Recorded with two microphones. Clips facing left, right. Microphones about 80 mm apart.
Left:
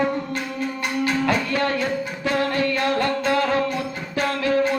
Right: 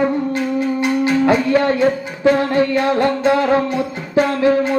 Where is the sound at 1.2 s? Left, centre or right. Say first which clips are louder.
Right 8 dB; right.